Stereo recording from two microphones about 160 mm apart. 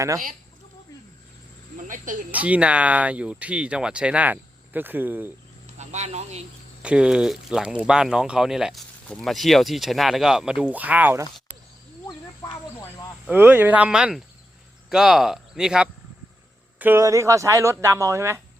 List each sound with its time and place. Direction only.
1.9 s speech: 55° right (ahead or behind)
2.3 s speech: 10° right (ahead or behind)
5.7 s speech: 45° right (ahead or behind)
6.8 s speech: 5° right (ahead or behind)
13.2 s speech: 10° right (ahead or behind)